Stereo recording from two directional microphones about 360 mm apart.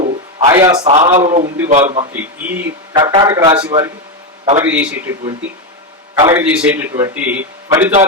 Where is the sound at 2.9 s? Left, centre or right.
Centre.